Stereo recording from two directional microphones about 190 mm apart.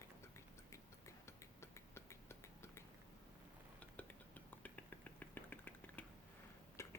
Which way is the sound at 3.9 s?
10° left (ahead or behind).